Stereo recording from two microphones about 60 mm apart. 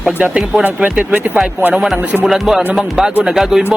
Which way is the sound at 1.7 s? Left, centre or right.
Centre.